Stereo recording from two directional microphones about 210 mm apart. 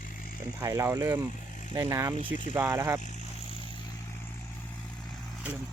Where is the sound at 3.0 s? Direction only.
30° left (ahead or behind).